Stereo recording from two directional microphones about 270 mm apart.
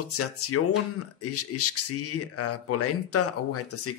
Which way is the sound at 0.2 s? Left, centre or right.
Left.